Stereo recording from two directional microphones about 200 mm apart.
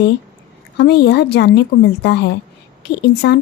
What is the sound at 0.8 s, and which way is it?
A woman's voice, 55° left (ahead or behind).